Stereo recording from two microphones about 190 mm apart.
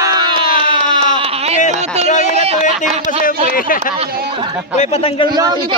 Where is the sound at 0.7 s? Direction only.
30° right (ahead or behind).